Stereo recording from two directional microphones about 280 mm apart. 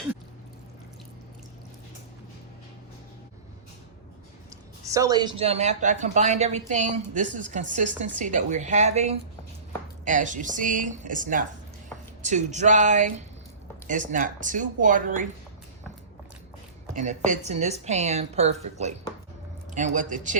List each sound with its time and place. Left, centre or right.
4.9 s speech: centre; by 15.3 s right
16.9 s speech: right